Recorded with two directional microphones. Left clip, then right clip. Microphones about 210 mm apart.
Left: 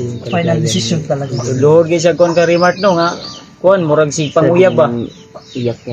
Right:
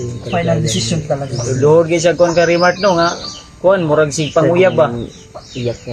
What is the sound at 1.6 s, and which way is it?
Speech, 20° left (ahead or behind).